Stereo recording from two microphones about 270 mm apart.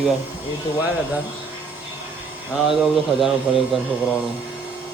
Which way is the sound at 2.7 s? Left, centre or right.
Centre.